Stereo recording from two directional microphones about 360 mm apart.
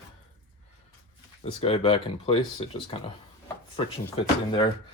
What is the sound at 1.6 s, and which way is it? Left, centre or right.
Speech, centre.